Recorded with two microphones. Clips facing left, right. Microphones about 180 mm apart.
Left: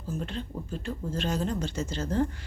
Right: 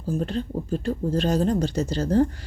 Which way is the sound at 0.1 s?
40° right (ahead or behind).